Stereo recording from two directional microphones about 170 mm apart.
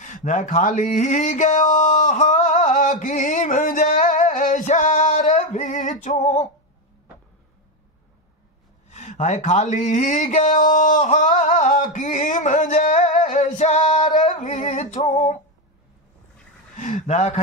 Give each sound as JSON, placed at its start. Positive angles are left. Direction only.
{"t": 0.0, "sound": "speech", "side_deg": 50}
{"t": 5.5, "sound": "music", "side_deg": 45}
{"t": 8.8, "sound": "speech", "side_deg": 40}
{"t": 16.7, "sound": "a sound", "side_deg": 45}